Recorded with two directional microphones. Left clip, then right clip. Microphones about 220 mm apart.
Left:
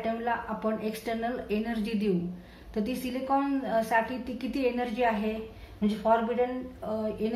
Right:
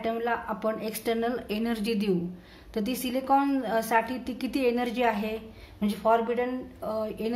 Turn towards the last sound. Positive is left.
turn(degrees=-45)  # may be behind; listen again after turning